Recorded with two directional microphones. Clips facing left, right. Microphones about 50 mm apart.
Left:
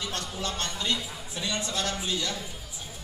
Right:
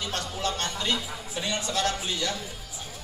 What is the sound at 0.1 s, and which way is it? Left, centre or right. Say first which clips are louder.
Music: right 3 dB; right.